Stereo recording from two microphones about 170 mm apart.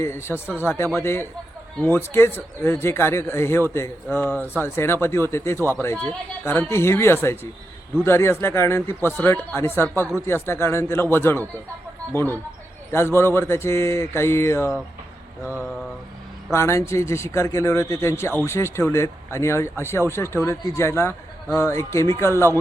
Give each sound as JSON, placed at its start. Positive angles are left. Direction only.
{"t": 0.0, "sound": "speech", "side_deg": 15}
{"t": 12.9, "sound": "speech", "side_deg": 15}
{"t": 16.5, "sound": "speech", "side_deg": 15}